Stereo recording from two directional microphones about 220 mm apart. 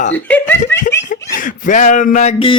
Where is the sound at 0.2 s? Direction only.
10° left (ahead or behind).